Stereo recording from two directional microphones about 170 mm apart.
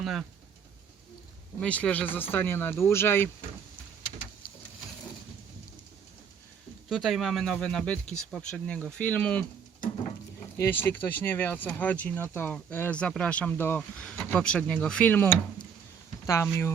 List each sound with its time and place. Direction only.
0.0 s speech: centre (ahead or behind)
1.6 s speech: 10° left (ahead or behind)
6.8 s speech: centre (ahead or behind)
10.6 s speech: 10° left (ahead or behind)